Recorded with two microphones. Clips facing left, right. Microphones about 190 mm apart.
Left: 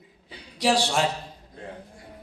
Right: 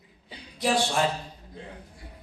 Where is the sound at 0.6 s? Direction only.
80° left.